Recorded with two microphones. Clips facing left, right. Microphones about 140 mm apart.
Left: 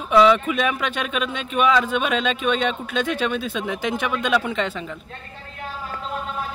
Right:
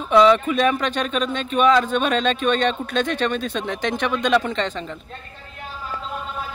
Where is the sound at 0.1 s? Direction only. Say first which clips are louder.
Right 1 dB; 5° left (ahead or behind).